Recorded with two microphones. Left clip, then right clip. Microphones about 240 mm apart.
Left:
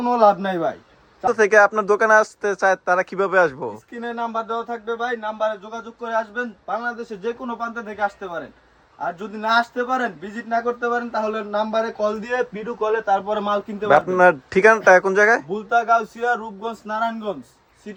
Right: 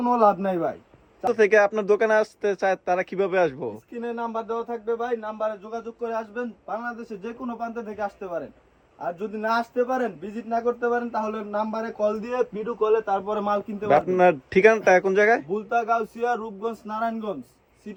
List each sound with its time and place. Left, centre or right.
0.0 s speech: left
1.2 s speech: centre
4.0 s speech: left
9.6 s speech: left
13.8 s speech: centre
15.5 s speech: left